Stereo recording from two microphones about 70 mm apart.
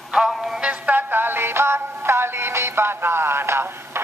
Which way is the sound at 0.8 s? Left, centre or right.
Right.